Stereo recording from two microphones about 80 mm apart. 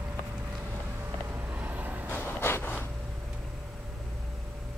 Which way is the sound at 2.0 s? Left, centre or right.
Left.